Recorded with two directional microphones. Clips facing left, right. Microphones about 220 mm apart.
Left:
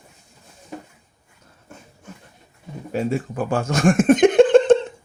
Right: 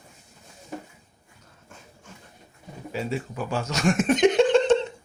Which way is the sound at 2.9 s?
50° left (ahead or behind).